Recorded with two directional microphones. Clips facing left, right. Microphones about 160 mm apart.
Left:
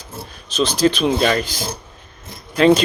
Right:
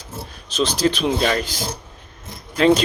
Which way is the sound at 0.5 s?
65° left (ahead or behind).